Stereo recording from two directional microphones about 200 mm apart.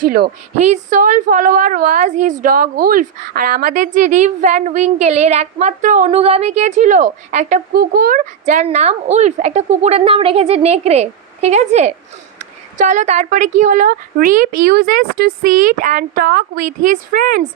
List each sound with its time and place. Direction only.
0.0 s a woman's voice: 50° right (ahead or behind)